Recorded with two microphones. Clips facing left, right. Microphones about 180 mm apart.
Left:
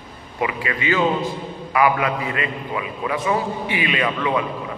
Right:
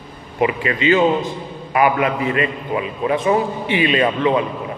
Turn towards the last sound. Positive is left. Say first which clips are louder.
# right 5 dB
turn(degrees=-30)  # may be behind; listen again after turning